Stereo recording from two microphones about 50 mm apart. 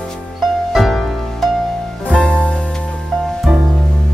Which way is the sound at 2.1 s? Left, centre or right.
Left.